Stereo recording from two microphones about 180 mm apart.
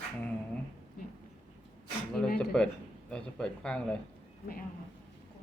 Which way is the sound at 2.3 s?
5° left (ahead or behind).